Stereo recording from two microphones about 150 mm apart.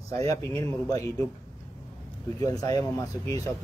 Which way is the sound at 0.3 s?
25° left (ahead or behind).